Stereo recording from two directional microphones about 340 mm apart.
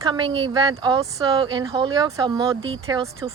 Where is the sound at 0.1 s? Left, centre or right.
Centre.